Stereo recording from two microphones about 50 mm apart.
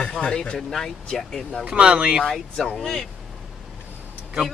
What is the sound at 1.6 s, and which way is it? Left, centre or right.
Speech, right.